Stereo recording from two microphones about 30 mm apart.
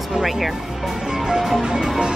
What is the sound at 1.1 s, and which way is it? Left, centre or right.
Music, centre.